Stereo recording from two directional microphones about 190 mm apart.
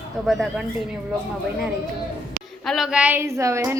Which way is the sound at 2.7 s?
5° right (ahead or behind).